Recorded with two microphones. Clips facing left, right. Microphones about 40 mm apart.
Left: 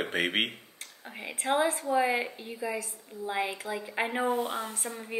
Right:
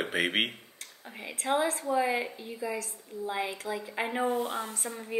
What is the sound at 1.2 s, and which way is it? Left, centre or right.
A woman's voice, centre.